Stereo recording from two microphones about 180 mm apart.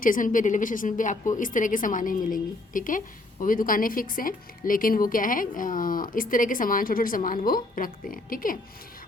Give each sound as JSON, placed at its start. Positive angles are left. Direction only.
{"t": 0.0, "sound": "a woman's voice", "side_deg": 50}